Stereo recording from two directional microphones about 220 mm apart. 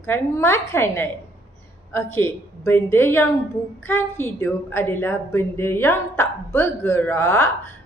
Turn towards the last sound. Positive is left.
turn(degrees=10)  # may be behind; listen again after turning